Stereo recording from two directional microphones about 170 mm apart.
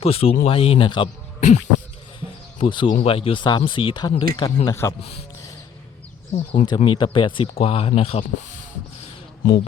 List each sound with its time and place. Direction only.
0.0 s speech: 35° left (ahead or behind)
1.4 s speech: 45° left (ahead or behind)
2.6 s speech: 30° left (ahead or behind)
6.3 s speech: 40° left (ahead or behind)
6.7 s speech: 30° left (ahead or behind)